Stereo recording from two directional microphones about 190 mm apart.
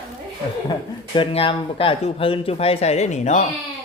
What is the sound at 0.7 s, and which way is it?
A man's voice, 25° left (ahead or behind).